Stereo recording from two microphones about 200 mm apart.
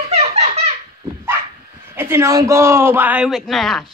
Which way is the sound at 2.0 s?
15° right (ahead or behind).